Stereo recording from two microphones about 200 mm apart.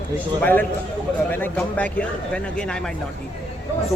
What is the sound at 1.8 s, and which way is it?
Speech, 5° left (ahead or behind).